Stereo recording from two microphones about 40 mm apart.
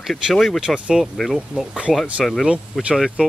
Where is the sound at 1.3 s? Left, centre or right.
Centre.